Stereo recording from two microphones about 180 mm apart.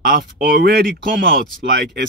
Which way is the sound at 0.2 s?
60° right (ahead or behind).